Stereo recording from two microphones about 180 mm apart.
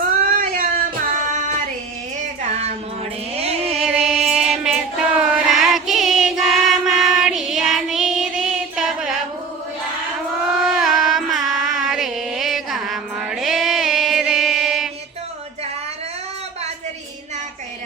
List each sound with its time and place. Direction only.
0.2 s child singing: 50° right (ahead or behind)
2.4 s music: 35° right (ahead or behind)
3.8 s music: 5° right (ahead or behind)
4.3 s child singing: 5° right (ahead or behind)
10.4 s music: centre (ahead or behind)